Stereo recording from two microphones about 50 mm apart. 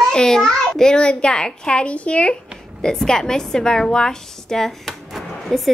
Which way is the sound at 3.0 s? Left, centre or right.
Centre.